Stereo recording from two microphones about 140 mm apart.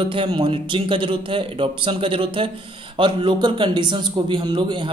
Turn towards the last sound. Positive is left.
turn(degrees=-35)  # may be behind; listen again after turning